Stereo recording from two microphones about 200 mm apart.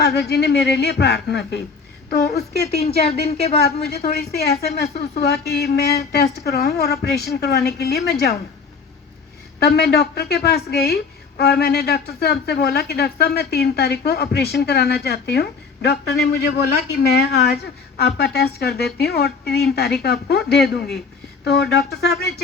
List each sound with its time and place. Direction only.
0.0 s a woman's voice: 55° left (ahead or behind)
2.7 s speech: 30° left (ahead or behind)
3.6 s a woman's voice: 55° left (ahead or behind)
9.6 s a woman's voice: 55° left (ahead or behind)